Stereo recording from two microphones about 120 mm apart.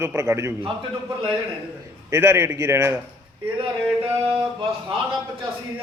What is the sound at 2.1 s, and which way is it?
Speech, 20° right (ahead or behind).